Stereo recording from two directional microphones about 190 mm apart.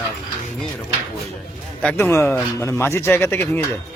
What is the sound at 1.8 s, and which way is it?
Speech, 10° left (ahead or behind).